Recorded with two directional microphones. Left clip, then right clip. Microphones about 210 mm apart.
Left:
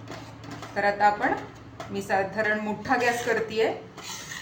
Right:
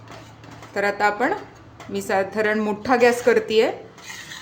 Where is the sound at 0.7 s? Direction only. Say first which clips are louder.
Right 1 dB; 55° right (ahead or behind).